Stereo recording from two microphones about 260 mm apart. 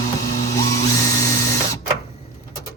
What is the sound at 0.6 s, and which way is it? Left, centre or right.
Dental drill, centre.